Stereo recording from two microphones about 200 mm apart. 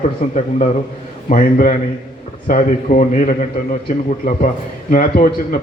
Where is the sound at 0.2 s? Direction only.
40° left (ahead or behind).